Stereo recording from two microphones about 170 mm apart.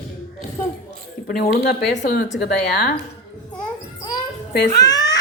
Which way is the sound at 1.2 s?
60° left (ahead or behind).